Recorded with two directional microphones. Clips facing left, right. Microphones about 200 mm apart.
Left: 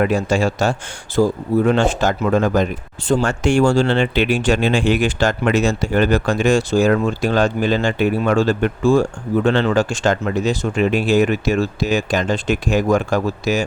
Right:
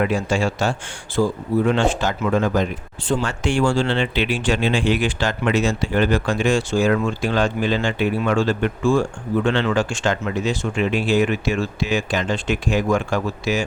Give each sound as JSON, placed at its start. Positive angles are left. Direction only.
{"t": 0.0, "sound": "speech", "side_deg": 40}